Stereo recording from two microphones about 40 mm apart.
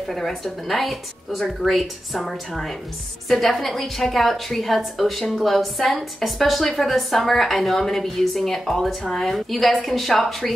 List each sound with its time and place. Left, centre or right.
0.0 s speech: centre